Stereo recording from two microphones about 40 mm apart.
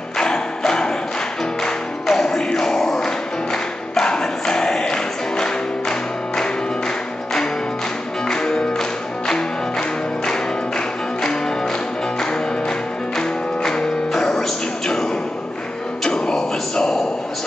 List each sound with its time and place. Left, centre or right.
0.2 s music: centre
8.3 s music: centre
13.6 s music: centre
16.0 s a sound: centre